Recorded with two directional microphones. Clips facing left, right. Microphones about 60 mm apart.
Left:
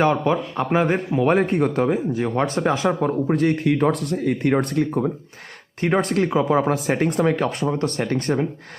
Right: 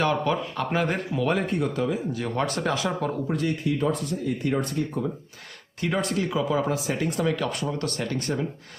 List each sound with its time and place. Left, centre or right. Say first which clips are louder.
0.0 s speech: left 5 dB; left
2.1 s speech: left 5 dB; left
3.2 s speech: left 9 dB; left
5.8 s speech: left 6 dB; left